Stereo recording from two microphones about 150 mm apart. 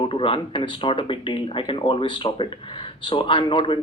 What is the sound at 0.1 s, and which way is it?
Speech, 35° left (ahead or behind).